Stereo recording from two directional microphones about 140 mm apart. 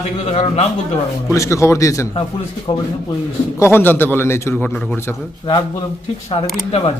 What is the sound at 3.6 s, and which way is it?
A man's voice, 15° left (ahead or behind).